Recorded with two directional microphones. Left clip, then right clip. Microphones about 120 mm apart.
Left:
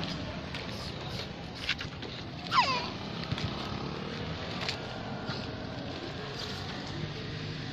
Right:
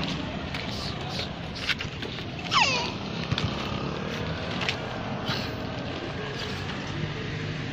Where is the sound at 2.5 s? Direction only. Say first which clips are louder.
Right 4 dB; 30° left (ahead or behind).